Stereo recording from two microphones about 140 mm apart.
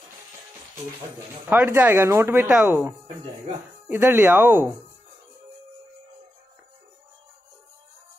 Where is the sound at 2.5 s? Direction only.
5° right (ahead or behind).